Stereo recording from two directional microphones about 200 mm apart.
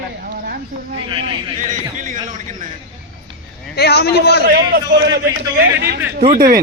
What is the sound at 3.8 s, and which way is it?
Speech, 55° left (ahead or behind).